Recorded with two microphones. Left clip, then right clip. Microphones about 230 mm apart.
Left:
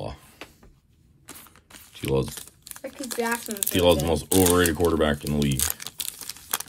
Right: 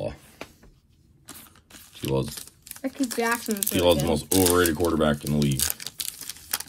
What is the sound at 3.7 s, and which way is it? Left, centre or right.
Speech, centre.